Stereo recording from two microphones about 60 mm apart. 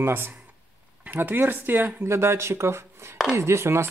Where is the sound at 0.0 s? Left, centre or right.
Right.